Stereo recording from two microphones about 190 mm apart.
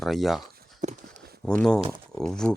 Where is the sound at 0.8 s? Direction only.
40° right (ahead or behind).